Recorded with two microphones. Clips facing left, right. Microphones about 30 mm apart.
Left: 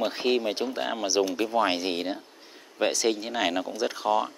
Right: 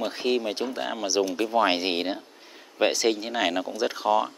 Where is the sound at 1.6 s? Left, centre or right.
Right; by 4.3 s centre.